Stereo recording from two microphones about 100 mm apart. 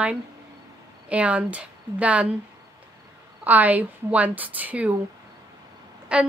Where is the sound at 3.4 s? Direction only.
15° right (ahead or behind).